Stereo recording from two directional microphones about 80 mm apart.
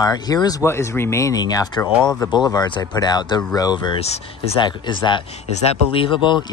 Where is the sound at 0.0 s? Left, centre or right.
Left.